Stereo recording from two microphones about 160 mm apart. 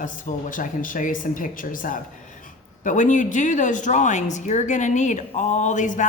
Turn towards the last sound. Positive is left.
turn(degrees=50)  # may be behind; listen again after turning